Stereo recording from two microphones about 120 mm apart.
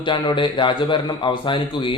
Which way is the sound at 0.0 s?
40° left (ahead or behind).